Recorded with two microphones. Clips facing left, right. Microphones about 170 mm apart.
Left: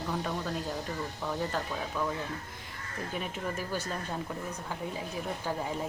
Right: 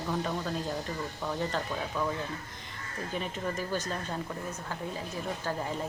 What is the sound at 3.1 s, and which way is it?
Speech, 10° left (ahead or behind).